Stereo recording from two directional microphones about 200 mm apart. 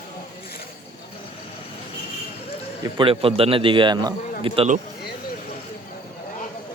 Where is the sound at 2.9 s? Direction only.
25° right (ahead or behind).